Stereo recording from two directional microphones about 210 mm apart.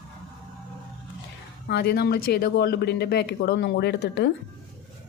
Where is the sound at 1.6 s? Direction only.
50° left (ahead or behind).